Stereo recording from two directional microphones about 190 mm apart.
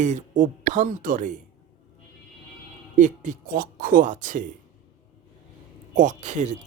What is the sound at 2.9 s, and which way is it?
Speech, 40° right (ahead or behind).